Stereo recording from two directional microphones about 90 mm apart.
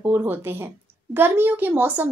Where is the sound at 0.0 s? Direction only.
25° right (ahead or behind).